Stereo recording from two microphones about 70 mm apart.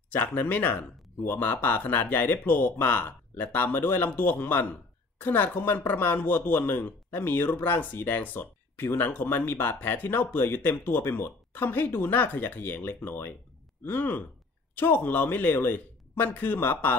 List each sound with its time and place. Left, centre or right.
0.1 s speech: left